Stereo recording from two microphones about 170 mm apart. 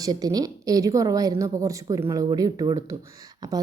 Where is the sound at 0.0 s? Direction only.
20° right (ahead or behind).